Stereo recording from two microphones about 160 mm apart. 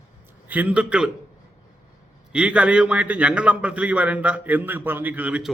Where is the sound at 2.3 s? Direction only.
5° right (ahead or behind).